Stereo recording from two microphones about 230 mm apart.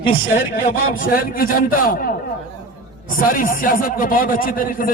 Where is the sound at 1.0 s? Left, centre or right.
Left.